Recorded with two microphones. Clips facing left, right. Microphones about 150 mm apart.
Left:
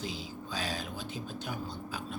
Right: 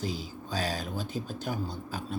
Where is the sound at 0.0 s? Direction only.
40° right (ahead or behind).